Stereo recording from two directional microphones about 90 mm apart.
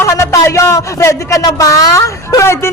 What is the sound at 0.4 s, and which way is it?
Speech, 35° left (ahead or behind).